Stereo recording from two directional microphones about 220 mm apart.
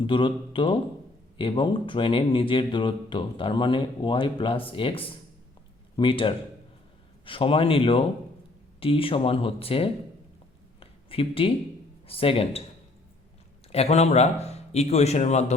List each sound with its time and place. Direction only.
0.0 s speech: 20° left (ahead or behind)
10.8 s a sound: 25° left (ahead or behind)
12.0 s speech: 25° left (ahead or behind)
13.7 s a man's voice: 30° left (ahead or behind)